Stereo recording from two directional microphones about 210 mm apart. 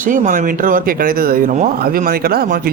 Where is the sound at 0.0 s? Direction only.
40° right (ahead or behind).